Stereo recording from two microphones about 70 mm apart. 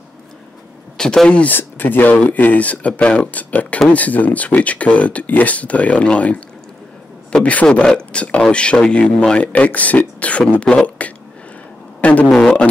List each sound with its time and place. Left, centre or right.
0.9 s speech: centre
1.4 s speech: left
10.7 s speech: centre
12.0 s speech: left